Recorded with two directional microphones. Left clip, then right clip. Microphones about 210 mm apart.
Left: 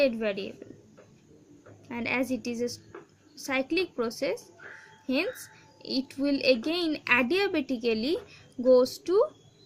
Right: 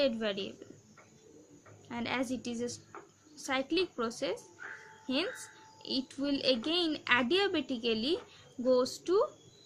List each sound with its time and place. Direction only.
0.0 s speech: 25° left (ahead or behind)
1.9 s speech: 25° left (ahead or behind)